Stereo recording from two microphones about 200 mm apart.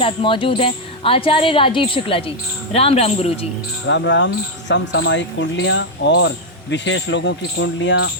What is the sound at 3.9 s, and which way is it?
Speech, 65° left (ahead or behind).